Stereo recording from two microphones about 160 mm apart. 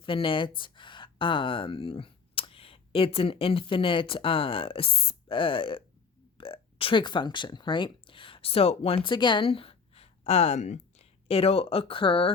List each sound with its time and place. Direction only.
0.0 s speech: 30° left (ahead or behind)